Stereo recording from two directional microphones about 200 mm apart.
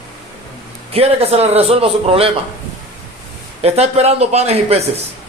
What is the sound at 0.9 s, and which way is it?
A man's voice, 30° right (ahead or behind).